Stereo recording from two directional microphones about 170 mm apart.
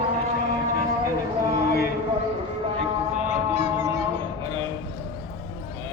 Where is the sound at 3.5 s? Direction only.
40° left (ahead or behind).